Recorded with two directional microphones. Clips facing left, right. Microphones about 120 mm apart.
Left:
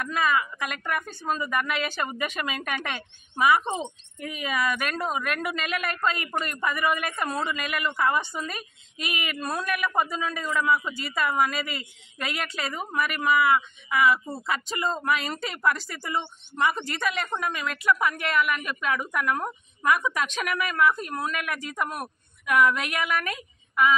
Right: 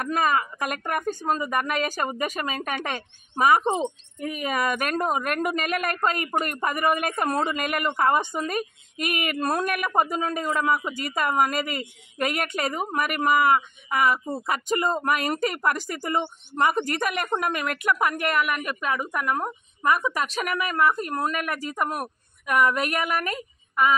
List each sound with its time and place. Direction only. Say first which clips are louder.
0.0 s a woman's voice: right 2 dB; 45° right (ahead or behind)
14.2 s speech: right 5 dB; 15° right (ahead or behind)
14.5 s a woman's voice: right 4 dB; 50° right (ahead or behind)
19.0 s a woman's voice: right 1 dB; 30° right (ahead or behind)